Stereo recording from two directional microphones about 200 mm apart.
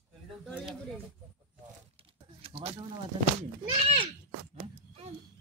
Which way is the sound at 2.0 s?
30° right (ahead or behind).